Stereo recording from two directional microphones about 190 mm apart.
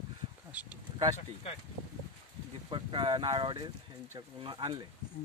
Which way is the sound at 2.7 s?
25° right (ahead or behind).